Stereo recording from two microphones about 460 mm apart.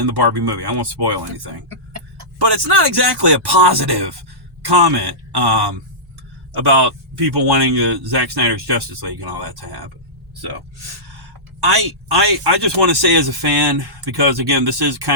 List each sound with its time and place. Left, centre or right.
0.1 s speech: right
11.6 s speech: right